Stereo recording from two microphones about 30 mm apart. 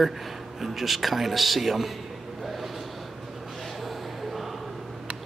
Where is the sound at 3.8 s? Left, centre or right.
Centre.